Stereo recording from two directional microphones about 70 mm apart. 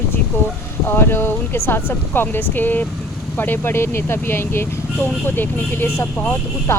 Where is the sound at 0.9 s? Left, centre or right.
Left.